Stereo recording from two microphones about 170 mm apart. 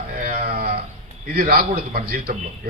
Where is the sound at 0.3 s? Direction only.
55° right (ahead or behind).